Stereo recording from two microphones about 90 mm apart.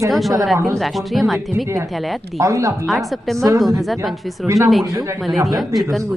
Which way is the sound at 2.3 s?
35° right (ahead or behind).